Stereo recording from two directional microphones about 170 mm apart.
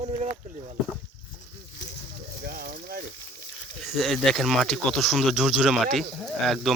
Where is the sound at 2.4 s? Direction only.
60° right (ahead or behind).